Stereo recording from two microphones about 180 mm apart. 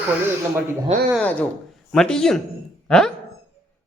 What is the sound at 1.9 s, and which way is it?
Speech, 5° left (ahead or behind).